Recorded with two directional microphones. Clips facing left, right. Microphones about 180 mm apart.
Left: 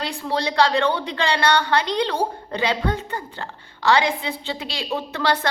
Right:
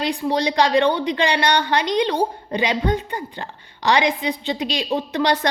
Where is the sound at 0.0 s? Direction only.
15° right (ahead or behind).